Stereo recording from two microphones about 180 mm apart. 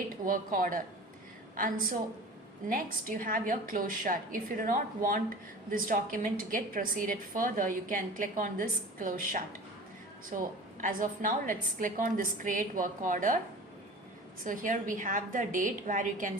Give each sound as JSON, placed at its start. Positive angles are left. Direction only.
{"t": 0.3, "sound": "a woman's voice", "side_deg": -50}
{"t": 10.8, "sound": "a woman's voice", "side_deg": -45}
{"t": 14.4, "sound": "a woman's voice", "side_deg": -45}